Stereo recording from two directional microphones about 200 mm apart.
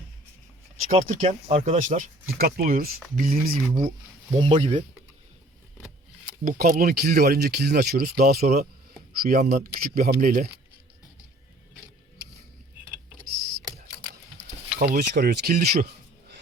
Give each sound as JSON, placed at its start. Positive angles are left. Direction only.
{"t": 0.9, "sound": "speech", "side_deg": -40}
{"t": 4.4, "sound": "speech", "side_deg": -30}
{"t": 6.4, "sound": "speech", "side_deg": -45}
{"t": 14.8, "sound": "speech", "side_deg": -50}